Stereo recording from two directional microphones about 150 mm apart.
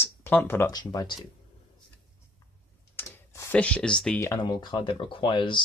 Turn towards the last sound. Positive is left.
turn(degrees=35)  # may be behind; listen again after turning